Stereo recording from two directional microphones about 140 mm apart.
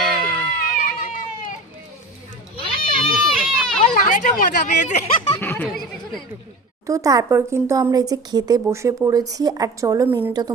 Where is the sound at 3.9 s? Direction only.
70° left (ahead or behind).